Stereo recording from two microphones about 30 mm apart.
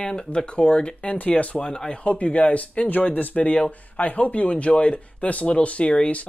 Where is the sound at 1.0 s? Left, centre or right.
Left.